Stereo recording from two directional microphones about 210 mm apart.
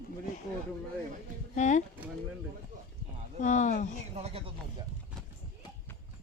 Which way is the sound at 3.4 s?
35° left (ahead or behind).